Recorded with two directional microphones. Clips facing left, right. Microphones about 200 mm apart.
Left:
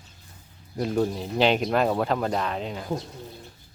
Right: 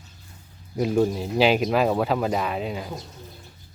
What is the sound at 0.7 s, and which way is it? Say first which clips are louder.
Speech: right 3 dB; 5° right (ahead or behind).